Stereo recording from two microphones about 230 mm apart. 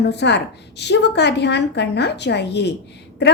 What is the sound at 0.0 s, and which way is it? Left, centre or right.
A woman's voice, left.